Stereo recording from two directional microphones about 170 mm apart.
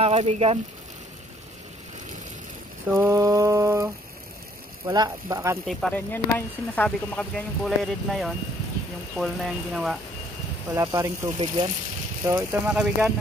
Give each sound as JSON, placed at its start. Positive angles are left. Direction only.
{"t": 0.0, "sound": "speech", "side_deg": -35}
{"t": 2.9, "sound": "a sound", "side_deg": -15}
{"t": 4.8, "sound": "speech", "side_deg": -20}
{"t": 5.7, "sound": "speech", "side_deg": 5}
{"t": 10.7, "sound": "speech", "side_deg": -20}
{"t": 11.3, "sound": "speech", "side_deg": -30}
{"t": 12.3, "sound": "a sound", "side_deg": -15}